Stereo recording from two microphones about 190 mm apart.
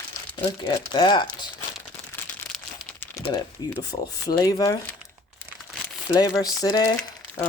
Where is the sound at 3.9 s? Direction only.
20° left (ahead or behind).